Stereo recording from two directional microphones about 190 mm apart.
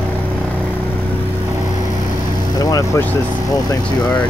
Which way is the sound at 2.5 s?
20° left (ahead or behind).